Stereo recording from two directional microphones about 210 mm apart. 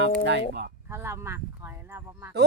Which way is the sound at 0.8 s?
10° right (ahead or behind).